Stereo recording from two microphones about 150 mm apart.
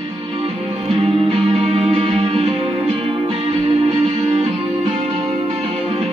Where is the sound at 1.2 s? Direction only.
40° right (ahead or behind).